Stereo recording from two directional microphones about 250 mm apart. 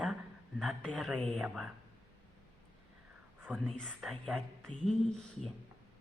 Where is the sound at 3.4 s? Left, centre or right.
Centre.